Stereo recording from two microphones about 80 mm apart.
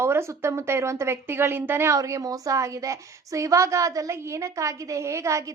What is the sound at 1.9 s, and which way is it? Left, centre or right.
A woman's voice, right.